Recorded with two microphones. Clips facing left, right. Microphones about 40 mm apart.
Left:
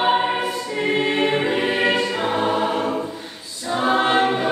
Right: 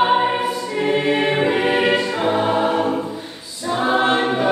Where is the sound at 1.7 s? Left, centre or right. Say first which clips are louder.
Right 2 dB; right.